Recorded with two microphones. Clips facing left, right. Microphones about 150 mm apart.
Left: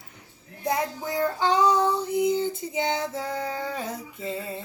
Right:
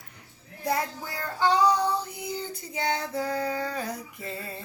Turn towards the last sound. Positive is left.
turn(degrees=20)  # may be behind; listen again after turning